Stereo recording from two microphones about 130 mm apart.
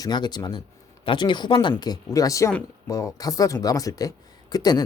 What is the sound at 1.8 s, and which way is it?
Speech, 30° left (ahead or behind).